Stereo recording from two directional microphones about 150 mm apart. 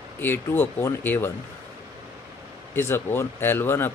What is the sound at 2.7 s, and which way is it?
Speech, 15° left (ahead or behind).